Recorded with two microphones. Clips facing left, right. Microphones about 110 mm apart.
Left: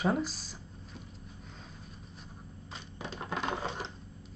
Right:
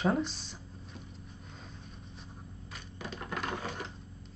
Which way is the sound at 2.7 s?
20° left (ahead or behind).